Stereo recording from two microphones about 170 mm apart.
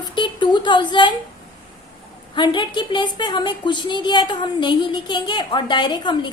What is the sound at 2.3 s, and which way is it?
A woman's voice, 25° left (ahead or behind).